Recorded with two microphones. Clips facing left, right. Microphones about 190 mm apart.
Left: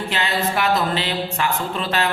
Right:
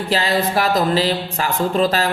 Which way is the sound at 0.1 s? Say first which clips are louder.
Right 6 dB; 35° right (ahead or behind).